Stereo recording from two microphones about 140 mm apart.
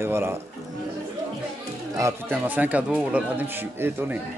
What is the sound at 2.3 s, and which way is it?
Speech, 10° right (ahead or behind).